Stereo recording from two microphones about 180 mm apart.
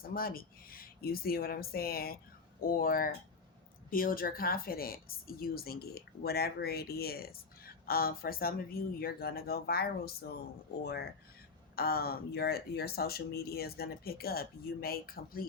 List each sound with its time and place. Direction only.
0.1 s a woman's voice: 55° left (ahead or behind)
11.8 s a woman's voice: 60° left (ahead or behind)